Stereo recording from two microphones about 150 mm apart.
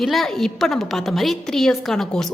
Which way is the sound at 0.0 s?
Centre (ahead or behind).